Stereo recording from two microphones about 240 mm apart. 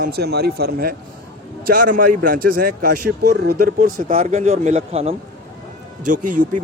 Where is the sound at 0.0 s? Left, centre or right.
Right.